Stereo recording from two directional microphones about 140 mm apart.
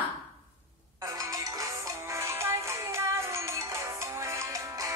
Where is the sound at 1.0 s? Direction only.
25° right (ahead or behind).